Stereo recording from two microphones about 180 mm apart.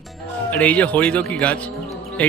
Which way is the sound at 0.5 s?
10° left (ahead or behind).